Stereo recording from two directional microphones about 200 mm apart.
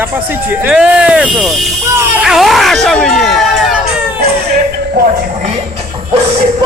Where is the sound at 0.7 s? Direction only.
5° right (ahead or behind).